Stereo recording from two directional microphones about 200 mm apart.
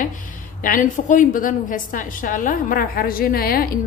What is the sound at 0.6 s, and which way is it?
A woman's voice, 40° left (ahead or behind).